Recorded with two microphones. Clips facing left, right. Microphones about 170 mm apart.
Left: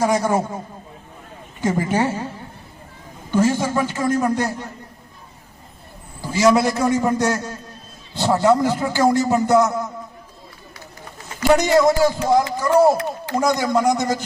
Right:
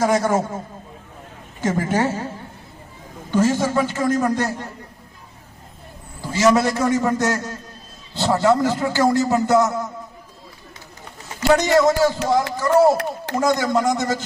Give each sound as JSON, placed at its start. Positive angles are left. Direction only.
{"t": 0.0, "sound": "a man's voice", "side_deg": 15}
{"t": 1.6, "sound": "a man's voice", "side_deg": 15}
{"t": 3.3, "sound": "a man's voice", "side_deg": 15}
{"t": 6.3, "sound": "a man's voice", "side_deg": 15}
{"t": 11.4, "sound": "a man's voice", "side_deg": 15}